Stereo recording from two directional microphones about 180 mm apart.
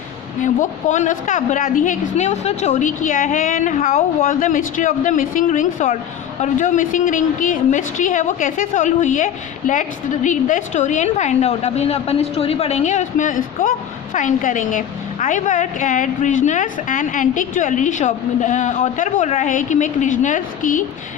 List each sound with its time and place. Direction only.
0.4 s a woman's voice: 45° left (ahead or behind)